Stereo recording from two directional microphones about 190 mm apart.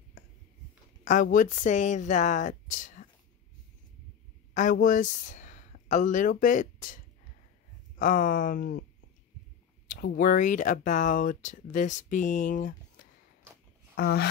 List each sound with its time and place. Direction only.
1.0 s speech: 45° left (ahead or behind)
4.6 s speech: 45° left (ahead or behind)
8.0 s speech: 45° left (ahead or behind)
9.8 s speech: 50° left (ahead or behind)
13.9 s a sound: 55° left (ahead or behind)